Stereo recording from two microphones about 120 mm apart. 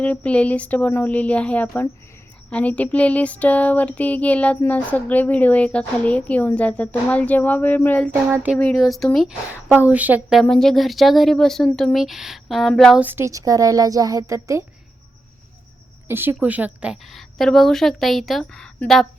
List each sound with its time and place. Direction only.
0.0 s a sound: 10° left (ahead or behind)
8.1 s speech: 15° right (ahead or behind)
8.7 s a woman's voice: centre (ahead or behind)
9.6 s speech: 15° right (ahead or behind)
10.5 s a woman's voice: 5° left (ahead or behind)
13.0 s a woman's voice: 15° right (ahead or behind)
16.0 s speech: 20° right (ahead or behind)
17.1 s a woman's voice: centre (ahead or behind)